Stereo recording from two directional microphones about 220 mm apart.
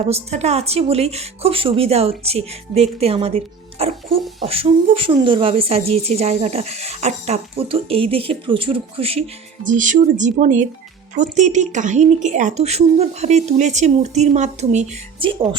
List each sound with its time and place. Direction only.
0.0 s a woman's voice: 30° right (ahead or behind)